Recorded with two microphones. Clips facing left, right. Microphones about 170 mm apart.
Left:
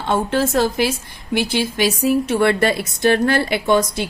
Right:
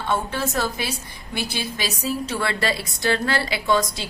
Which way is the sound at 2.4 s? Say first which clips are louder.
Left 8 dB; 55° left (ahead or behind).